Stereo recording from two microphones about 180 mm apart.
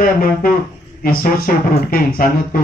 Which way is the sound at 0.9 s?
55° left (ahead or behind).